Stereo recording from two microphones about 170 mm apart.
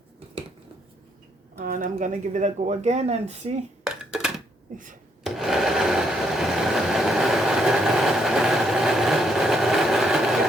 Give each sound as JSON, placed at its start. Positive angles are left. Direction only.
{"t": 1.5, "sound": "speech", "side_deg": -50}
{"t": 3.8, "sound": "a sound", "side_deg": -5}
{"t": 5.2, "sound": "sewing machine", "side_deg": 0}